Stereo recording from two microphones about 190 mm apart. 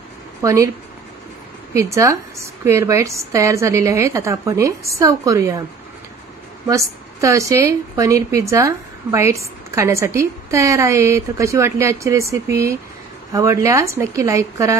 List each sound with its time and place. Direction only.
0.4 s speech: 15° right (ahead or behind)
1.7 s a woman's voice: 15° right (ahead or behind)
6.7 s a woman's voice: 15° right (ahead or behind)